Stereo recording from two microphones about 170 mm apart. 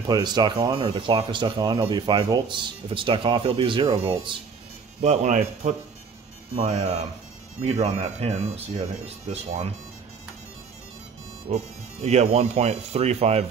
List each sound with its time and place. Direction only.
0.0 s speech: 25° right (ahead or behind); by 9.7 s 40° right (ahead or behind)
11.4 s speech: 40° right (ahead or behind)